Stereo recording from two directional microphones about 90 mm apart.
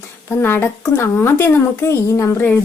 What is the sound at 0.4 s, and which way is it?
Speech, 25° left (ahead or behind).